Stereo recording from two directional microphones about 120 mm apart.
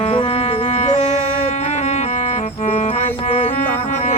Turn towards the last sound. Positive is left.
turn(degrees=90)